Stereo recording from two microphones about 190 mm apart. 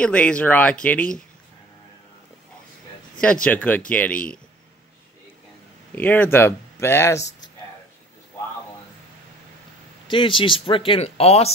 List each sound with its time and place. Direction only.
0.0 s speech: 5° left (ahead or behind)
3.4 s speech: 10° left (ahead or behind)
5.9 s speech: 10° left (ahead or behind)
10.0 s speech: 25° left (ahead or behind)